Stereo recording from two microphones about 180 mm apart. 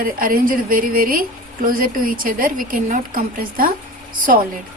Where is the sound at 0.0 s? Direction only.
50° right (ahead or behind).